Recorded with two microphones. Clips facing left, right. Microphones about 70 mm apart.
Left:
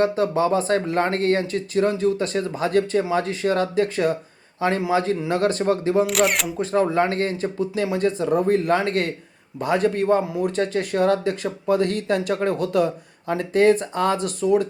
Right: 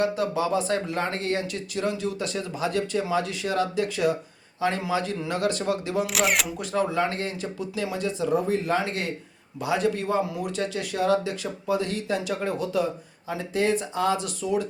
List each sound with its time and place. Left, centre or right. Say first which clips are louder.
0.0 s speech: left 5 dB; left
6.1 s speech: left 4 dB; centre
6.6 s speech: left 5 dB; left